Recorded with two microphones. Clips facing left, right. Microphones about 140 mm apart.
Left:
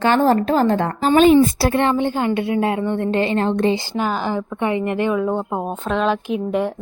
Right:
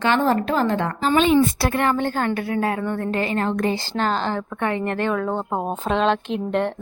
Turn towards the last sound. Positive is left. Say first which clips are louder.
# left 2 dB
turn(degrees=5)  # may be behind; listen again after turning